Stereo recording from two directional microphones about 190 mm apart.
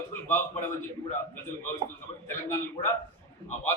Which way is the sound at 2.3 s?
15° left (ahead or behind).